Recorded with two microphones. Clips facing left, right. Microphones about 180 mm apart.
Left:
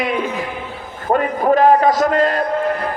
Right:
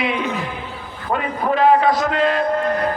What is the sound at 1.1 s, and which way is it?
A man's voice, 45° left (ahead or behind).